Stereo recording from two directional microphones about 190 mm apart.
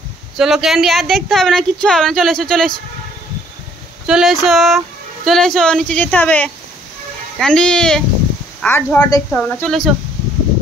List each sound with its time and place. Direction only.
0.4 s speech: centre (ahead or behind)
4.0 s a woman's voice: 5° right (ahead or behind)